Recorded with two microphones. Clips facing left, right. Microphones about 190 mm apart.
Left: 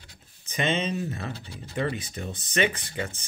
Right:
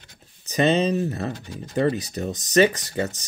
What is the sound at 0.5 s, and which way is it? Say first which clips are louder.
Speech: right 7 dB; 40° right (ahead or behind).